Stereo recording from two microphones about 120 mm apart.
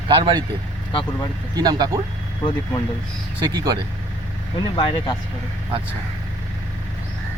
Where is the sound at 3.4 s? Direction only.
35° right (ahead or behind).